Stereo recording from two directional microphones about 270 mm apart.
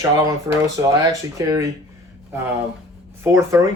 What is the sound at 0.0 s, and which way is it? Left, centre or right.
Speech, centre.